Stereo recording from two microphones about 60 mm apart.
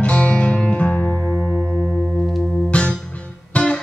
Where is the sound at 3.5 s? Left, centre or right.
Centre.